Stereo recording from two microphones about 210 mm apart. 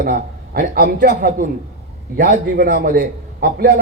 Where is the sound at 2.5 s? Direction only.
45° right (ahead or behind).